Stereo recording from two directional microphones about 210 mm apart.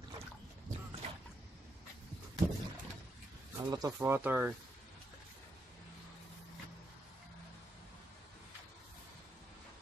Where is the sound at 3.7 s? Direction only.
15° right (ahead or behind).